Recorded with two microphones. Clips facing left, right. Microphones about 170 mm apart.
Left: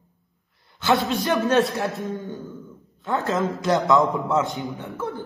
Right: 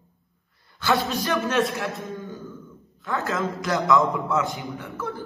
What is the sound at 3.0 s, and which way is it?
A man's voice, 25° left (ahead or behind).